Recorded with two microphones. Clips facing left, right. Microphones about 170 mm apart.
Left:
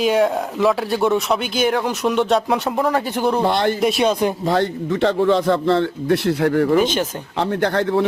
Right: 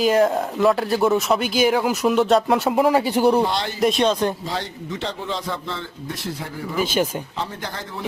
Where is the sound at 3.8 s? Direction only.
5° left (ahead or behind).